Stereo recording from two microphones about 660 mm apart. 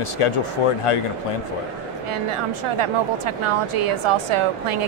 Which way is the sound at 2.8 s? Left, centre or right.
Right.